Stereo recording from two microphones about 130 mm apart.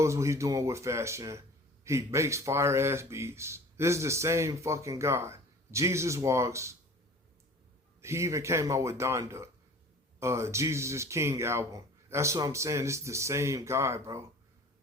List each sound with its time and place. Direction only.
0.0 s speech: 20° right (ahead or behind)
8.0 s speech: 20° right (ahead or behind)